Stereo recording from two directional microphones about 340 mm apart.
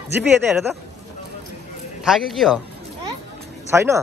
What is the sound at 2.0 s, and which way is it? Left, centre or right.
Speech, centre.